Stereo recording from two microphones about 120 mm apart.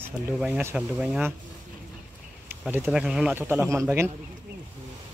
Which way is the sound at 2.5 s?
15° right (ahead or behind).